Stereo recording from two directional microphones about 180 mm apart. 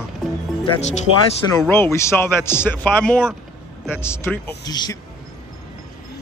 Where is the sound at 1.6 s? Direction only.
15° left (ahead or behind).